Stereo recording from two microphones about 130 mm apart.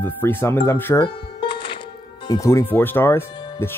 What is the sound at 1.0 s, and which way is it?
Music, 40° left (ahead or behind).